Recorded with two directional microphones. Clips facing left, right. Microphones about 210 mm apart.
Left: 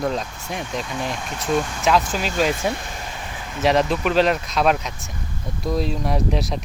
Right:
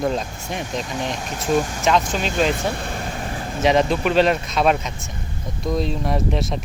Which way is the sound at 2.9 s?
45° right (ahead or behind).